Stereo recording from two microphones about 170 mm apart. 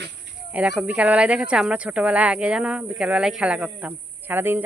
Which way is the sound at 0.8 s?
5° right (ahead or behind).